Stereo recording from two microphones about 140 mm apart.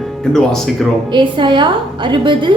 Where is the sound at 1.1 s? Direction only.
35° right (ahead or behind).